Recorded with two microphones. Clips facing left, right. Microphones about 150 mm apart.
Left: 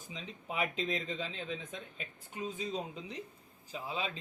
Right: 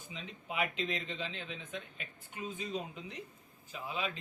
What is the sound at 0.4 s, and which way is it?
Speech, 40° left (ahead or behind).